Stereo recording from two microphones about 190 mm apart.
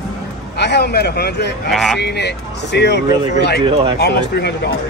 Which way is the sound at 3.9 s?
60° left (ahead or behind).